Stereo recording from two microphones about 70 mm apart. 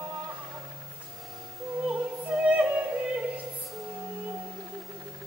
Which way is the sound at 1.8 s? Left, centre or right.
Centre.